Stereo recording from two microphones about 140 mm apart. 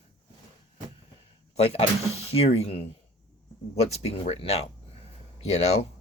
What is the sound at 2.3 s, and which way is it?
Speech, 45° left (ahead or behind).